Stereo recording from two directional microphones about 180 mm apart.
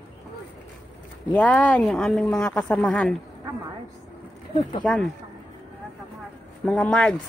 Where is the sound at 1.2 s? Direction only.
5° left (ahead or behind).